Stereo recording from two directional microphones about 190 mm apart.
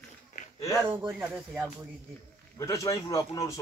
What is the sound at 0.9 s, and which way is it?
Speech, 10° right (ahead or behind).